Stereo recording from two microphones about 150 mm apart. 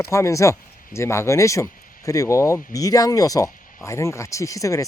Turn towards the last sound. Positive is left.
turn(degrees=20)  # may be behind; listen again after turning